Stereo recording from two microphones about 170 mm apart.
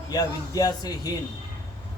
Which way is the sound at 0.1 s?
20° left (ahead or behind).